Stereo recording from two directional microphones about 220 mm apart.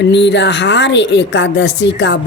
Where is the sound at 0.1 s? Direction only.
50° left (ahead or behind).